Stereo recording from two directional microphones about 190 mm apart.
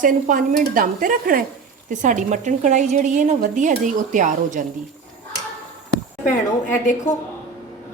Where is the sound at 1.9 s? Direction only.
40° right (ahead or behind).